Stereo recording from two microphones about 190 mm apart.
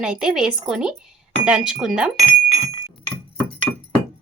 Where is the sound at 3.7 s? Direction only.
20° left (ahead or behind).